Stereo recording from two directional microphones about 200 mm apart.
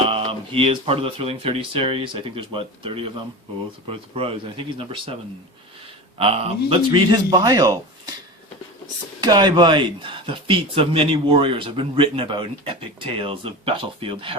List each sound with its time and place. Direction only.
0.1 s speech: 30° right (ahead or behind)
6.1 s speech: 30° right (ahead or behind)
9.2 s speech: 20° right (ahead or behind)